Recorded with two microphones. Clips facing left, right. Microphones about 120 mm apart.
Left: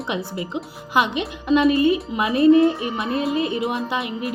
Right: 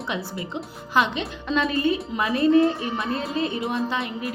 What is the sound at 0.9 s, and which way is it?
Speech, 15° left (ahead or behind).